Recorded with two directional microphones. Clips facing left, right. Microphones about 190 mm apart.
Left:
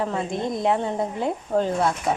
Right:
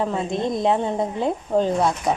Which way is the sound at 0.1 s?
25° right (ahead or behind).